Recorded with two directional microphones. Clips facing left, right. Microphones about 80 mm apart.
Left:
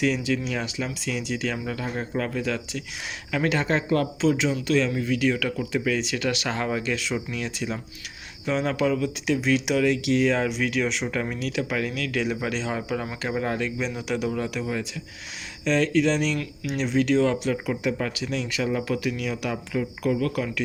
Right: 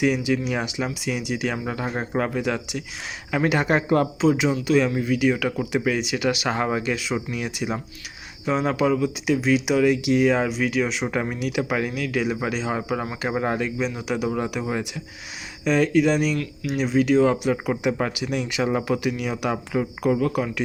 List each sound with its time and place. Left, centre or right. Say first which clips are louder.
0.0 s speech: right 3 dB; centre
4.2 s speech: right 3 dB; centre
6.9 s speech: right 2 dB; centre
11.0 s speech: right 3 dB; centre
13.6 s speech: right 2 dB; centre
14.3 s speech: right 2 dB; right
15.6 s speech: right 3 dB; centre
17.7 s speech: right 3 dB; right
18.1 s speech: right 2 dB; centre
18.6 s speech: right 3 dB; right
18.9 s speech: right 3 dB; centre